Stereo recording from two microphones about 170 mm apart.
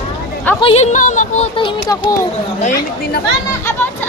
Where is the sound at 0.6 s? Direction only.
40° left (ahead or behind).